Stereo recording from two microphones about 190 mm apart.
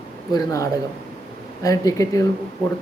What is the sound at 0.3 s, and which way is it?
Speech, 15° left (ahead or behind).